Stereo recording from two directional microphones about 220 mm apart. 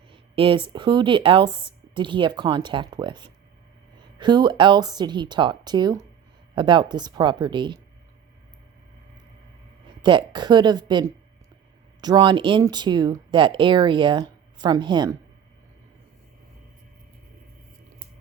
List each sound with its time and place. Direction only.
0.1 s speech: 25° right (ahead or behind)
10.0 s speech: 20° right (ahead or behind)